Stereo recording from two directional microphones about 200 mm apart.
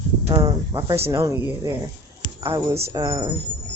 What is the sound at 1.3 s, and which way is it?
Speech, 15° right (ahead or behind).